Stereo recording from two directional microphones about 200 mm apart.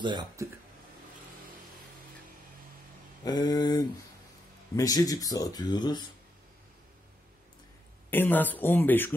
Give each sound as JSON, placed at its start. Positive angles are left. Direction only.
{"t": 0.0, "sound": "speech", "side_deg": -20}
{"t": 3.3, "sound": "speech", "side_deg": 20}
{"t": 8.1, "sound": "speech", "side_deg": 10}